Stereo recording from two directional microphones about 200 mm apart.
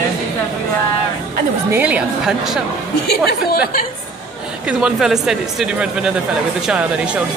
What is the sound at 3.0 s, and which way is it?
Speech, 50° left (ahead or behind).